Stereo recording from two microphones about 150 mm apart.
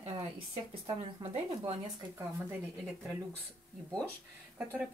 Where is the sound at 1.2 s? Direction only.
40° right (ahead or behind).